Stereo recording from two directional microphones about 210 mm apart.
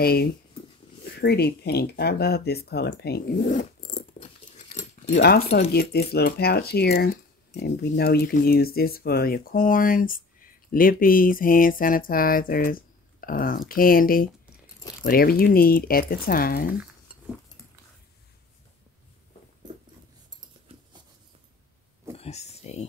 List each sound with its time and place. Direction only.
0.0 s speech: 45° left (ahead or behind)
5.1 s speech: 50° left (ahead or behind)
22.1 s a sound: 30° left (ahead or behind)